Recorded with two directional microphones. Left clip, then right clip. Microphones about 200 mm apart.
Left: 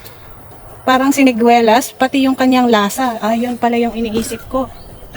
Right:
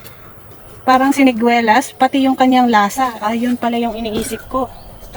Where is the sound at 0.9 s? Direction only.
45° left (ahead or behind).